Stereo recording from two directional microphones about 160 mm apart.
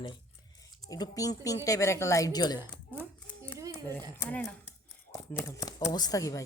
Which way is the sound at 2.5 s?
15° right (ahead or behind).